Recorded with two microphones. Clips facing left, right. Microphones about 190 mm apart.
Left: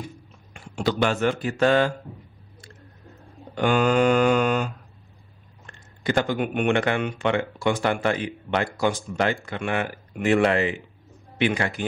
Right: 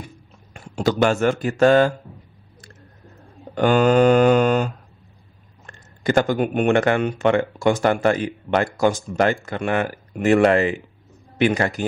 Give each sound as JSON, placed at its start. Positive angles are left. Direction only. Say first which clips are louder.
{"t": 0.5, "sound": "speech", "louder": "right 4 dB", "side_deg": -40}
{"t": 3.5, "sound": "mantra", "louder": "right 5 dB", "side_deg": -40}
{"t": 5.7, "sound": "speech", "louder": "right 4 dB", "side_deg": -45}